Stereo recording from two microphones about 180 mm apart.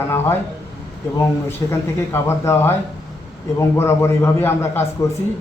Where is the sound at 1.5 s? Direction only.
15° left (ahead or behind).